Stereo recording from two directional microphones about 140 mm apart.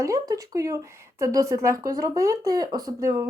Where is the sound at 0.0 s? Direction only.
25° right (ahead or behind).